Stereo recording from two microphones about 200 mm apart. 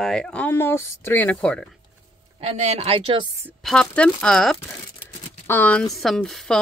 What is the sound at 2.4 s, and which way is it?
Speech, 35° right (ahead or behind).